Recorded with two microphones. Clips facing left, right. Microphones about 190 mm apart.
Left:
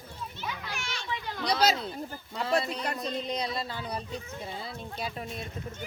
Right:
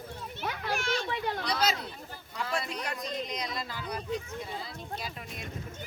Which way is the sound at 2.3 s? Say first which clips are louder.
Left 5 dB; 30° left (ahead or behind).